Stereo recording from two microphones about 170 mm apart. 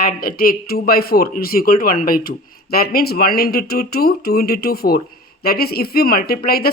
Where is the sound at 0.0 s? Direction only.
60° left (ahead or behind).